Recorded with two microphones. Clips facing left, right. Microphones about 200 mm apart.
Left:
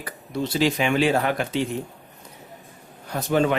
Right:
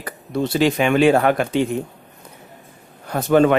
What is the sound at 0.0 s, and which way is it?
A man's voice, 60° right (ahead or behind).